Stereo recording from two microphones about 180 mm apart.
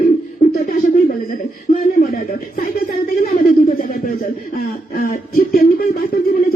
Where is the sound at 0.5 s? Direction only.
50° left (ahead or behind).